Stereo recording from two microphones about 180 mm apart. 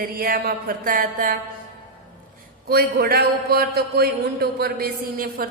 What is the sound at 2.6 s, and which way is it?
A man's voice, 60° right (ahead or behind).